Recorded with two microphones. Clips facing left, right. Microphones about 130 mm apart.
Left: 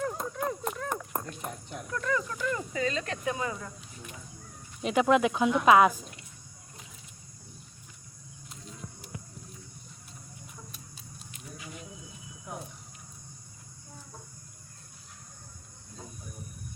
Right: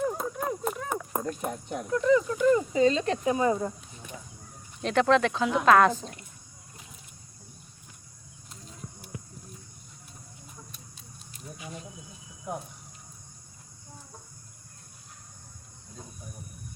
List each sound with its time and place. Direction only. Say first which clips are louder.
0.0 s a sound: right 2 dB; 5° right (ahead or behind)
1.9 s speech: right 9 dB; 20° right (ahead or behind)
4.8 s speech: right 1 dB; 10° left (ahead or behind)